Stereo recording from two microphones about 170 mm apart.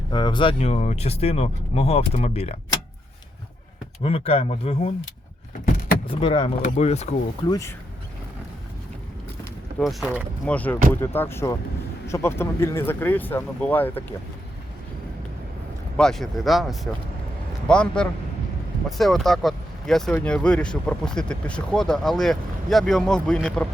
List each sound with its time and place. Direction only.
0.1 s speech: 25° left (ahead or behind)
4.0 s speech: 35° left (ahead or behind)
6.1 s speech: 30° left (ahead or behind)
7.4 s speech: 20° left (ahead or behind)
9.7 s speech: centre (ahead or behind)
16.0 s speech: centre (ahead or behind)